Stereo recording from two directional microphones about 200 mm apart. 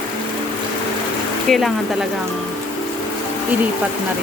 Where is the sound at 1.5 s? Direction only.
Centre (ahead or behind).